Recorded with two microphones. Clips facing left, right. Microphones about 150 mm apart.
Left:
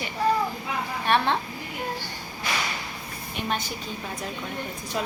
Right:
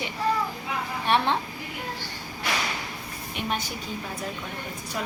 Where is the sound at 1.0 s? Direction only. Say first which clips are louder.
Even; 15° right (ahead or behind).